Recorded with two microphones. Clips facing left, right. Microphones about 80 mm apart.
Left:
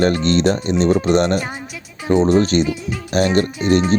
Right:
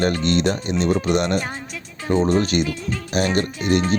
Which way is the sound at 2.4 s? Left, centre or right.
Left.